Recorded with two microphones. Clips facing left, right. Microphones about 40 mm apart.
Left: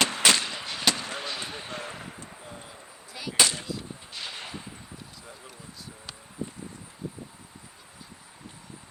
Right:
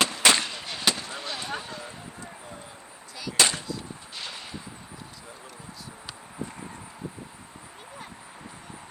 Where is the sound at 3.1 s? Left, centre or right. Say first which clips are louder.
Right 1 dB; centre.